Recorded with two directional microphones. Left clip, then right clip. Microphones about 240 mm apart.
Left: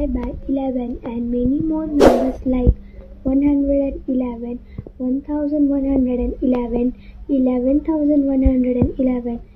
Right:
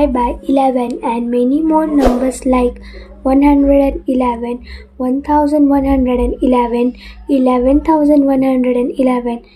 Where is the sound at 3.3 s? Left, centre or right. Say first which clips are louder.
Right 7 dB; centre.